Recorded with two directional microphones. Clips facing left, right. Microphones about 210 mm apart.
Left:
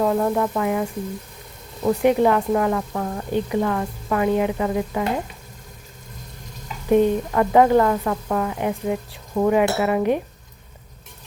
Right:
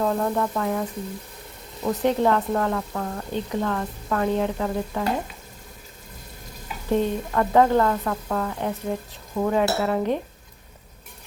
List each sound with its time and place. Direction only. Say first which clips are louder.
0.0 s speech: left 3 dB; 10° left (ahead or behind)
1.9 s speech: left 4 dB; 10° left (ahead or behind)
6.9 s speech: left 5 dB; 10° left (ahead or behind)